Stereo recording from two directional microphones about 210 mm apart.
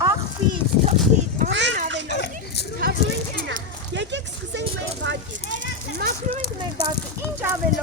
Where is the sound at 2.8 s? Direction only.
60° right (ahead or behind).